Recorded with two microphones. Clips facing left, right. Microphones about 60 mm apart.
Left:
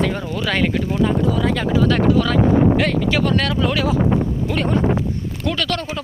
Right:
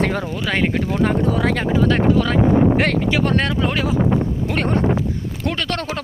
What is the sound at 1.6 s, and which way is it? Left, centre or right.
Speech, right.